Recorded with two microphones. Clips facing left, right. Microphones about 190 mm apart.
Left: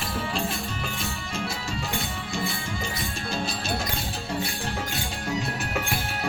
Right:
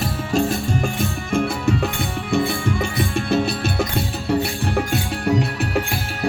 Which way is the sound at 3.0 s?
60° right (ahead or behind).